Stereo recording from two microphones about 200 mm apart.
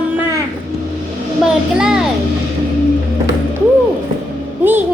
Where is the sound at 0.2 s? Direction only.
15° right (ahead or behind).